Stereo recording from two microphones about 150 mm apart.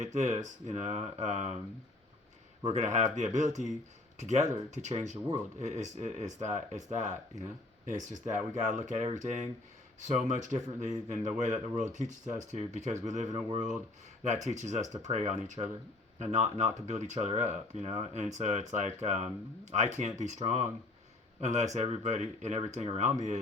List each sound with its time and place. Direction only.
0.0 s speech: 50° right (ahead or behind)
2.6 s speech: 50° right (ahead or behind)